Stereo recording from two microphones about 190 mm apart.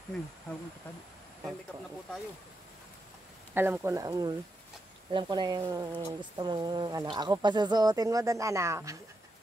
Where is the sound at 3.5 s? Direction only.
10° right (ahead or behind).